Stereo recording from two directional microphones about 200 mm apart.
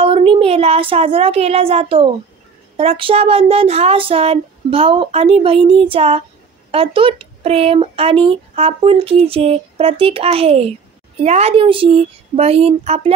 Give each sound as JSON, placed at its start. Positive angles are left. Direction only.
{"t": 0.0, "sound": "speech", "side_deg": -25}